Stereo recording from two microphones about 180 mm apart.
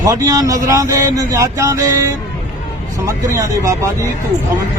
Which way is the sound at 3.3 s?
20° right (ahead or behind).